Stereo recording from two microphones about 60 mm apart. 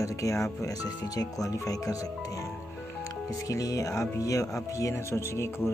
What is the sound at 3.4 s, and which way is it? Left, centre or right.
Speech, left.